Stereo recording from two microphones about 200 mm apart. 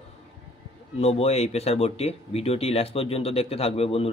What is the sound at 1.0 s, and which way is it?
Speech, 30° left (ahead or behind).